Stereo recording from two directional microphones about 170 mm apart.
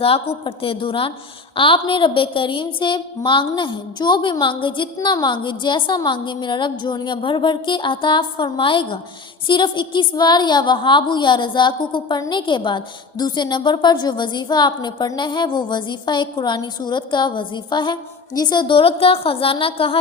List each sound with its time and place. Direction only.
0.4 s a woman's voice: 30° left (ahead or behind)